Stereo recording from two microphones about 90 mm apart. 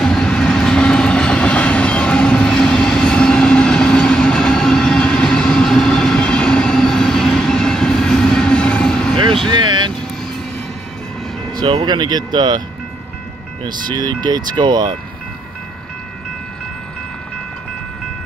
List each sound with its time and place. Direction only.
0.0 s train: 10° left (ahead or behind)
9.5 s vehicle: 55° right (ahead or behind)
11.7 s speech: 60° right (ahead or behind)
13.7 s speech: 50° right (ahead or behind)